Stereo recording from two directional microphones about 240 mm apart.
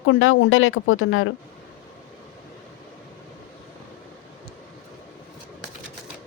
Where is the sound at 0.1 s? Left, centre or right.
Left.